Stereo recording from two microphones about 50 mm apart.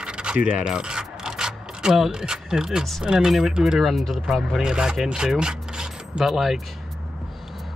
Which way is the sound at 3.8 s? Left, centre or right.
Centre.